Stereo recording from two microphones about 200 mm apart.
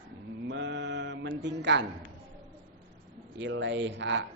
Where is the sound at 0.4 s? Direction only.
60° right (ahead or behind).